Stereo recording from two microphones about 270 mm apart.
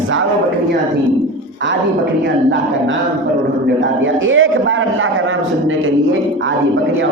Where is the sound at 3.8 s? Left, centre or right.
Right.